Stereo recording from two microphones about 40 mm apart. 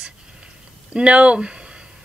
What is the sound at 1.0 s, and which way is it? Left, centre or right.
Speech, right.